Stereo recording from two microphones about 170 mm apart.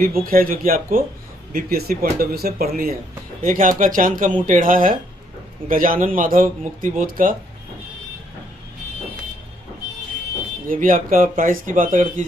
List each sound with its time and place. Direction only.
0.2 s speech: 55° right (ahead or behind)
10.7 s speech: 55° right (ahead or behind)